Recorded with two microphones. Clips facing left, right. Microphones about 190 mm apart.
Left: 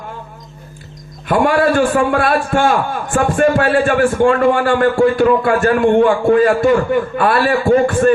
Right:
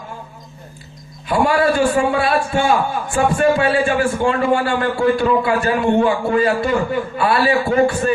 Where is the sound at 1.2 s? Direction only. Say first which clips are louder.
Left 2 dB; 50° left (ahead or behind).